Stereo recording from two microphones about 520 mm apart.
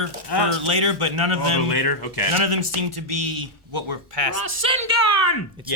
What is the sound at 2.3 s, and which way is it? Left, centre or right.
A man's voice, right.